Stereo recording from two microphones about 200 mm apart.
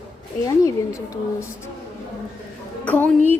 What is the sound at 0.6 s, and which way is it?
Speech, 15° left (ahead or behind).